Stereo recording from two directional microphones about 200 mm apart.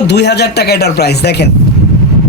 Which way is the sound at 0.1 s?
55° left (ahead or behind).